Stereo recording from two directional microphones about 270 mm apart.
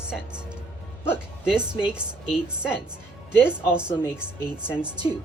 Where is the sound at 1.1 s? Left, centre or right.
Centre.